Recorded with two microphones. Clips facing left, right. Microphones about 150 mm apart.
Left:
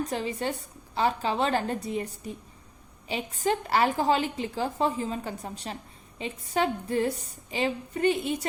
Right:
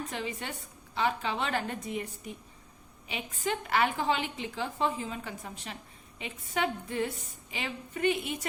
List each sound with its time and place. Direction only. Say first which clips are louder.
0.0 s a woman's voice: left 7 dB; 35° left (ahead or behind)